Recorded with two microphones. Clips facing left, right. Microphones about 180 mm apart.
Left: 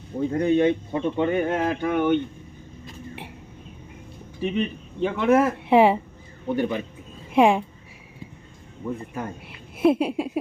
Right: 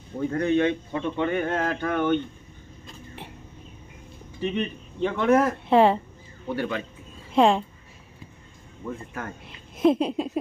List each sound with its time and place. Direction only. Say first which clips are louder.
0.2 s speech: left 2 dB; 15° left (ahead or behind)
4.4 s speech: left 2 dB; 10° left (ahead or behind)
8.8 s speech: left 4 dB; 15° left (ahead or behind)